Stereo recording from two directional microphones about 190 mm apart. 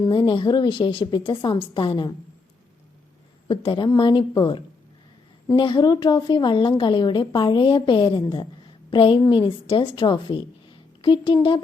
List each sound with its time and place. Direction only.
0.0 s a woman's voice: 25° left (ahead or behind)
3.5 s a woman's voice: 25° left (ahead or behind)